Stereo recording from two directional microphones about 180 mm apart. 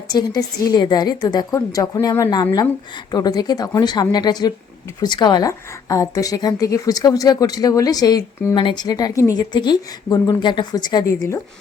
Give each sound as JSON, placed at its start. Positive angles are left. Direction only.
{"t": 0.1, "sound": "a woman's voice", "side_deg": 20}